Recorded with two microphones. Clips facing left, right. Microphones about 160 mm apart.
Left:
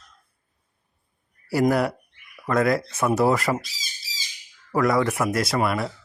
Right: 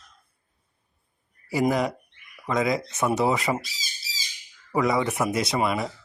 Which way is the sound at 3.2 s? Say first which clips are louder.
Left 5 dB; centre (ahead or behind).